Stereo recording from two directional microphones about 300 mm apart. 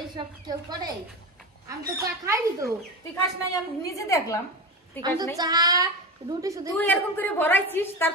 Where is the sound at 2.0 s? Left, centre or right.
Centre.